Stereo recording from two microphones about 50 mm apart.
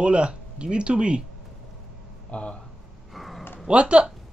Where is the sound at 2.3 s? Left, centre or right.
Left.